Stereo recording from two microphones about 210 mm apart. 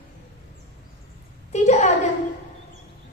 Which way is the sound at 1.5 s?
35° left (ahead or behind).